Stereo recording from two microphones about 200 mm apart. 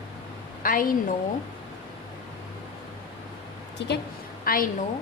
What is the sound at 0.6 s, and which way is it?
Speech, 45° left (ahead or behind).